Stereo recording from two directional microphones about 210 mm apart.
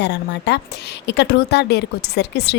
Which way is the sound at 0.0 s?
55° left (ahead or behind).